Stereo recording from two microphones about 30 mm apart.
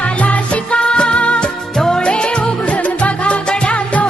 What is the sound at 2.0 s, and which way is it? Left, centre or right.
Music, left.